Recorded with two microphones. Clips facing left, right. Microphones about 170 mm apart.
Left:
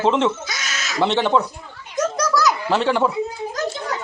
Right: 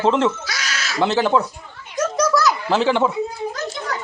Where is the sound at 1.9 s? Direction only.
Centre (ahead or behind).